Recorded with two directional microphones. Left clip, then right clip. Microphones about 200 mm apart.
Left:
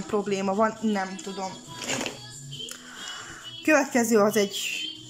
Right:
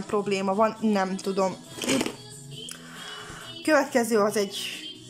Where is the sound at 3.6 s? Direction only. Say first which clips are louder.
Even; centre (ahead or behind).